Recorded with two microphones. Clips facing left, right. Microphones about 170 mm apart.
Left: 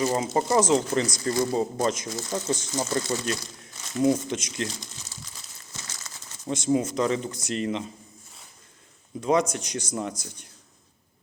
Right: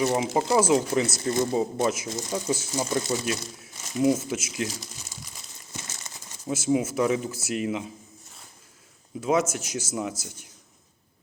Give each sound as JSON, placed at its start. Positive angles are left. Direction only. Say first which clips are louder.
{"t": 0.3, "sound": "speech", "louder": "even", "side_deg": -10}
{"t": 1.0, "sound": "speech", "louder": "even", "side_deg": -25}
{"t": 1.5, "sound": "speech", "louder": "even", "side_deg": -5}
{"t": 3.6, "sound": "crumpling", "louder": "even", "side_deg": -5}
{"t": 6.4, "sound": "speech", "louder": "even", "side_deg": -5}
{"t": 9.2, "sound": "speech", "louder": "left 1 dB", "side_deg": -5}